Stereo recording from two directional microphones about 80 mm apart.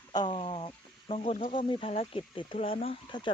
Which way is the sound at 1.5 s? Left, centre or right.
Left.